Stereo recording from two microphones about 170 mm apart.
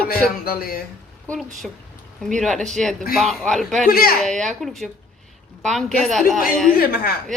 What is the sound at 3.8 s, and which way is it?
Speech, 60° left (ahead or behind).